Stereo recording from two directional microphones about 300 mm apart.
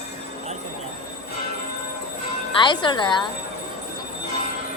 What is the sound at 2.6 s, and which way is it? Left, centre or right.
Speech, centre.